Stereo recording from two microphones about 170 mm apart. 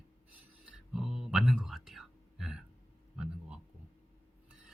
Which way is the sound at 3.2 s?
5° right (ahead or behind).